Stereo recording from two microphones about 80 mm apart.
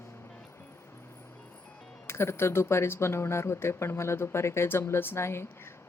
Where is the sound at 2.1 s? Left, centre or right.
Left.